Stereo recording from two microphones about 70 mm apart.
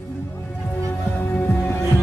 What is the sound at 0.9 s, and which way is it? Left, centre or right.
Music, left.